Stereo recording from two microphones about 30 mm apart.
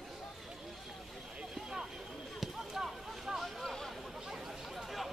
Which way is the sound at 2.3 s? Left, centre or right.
Centre.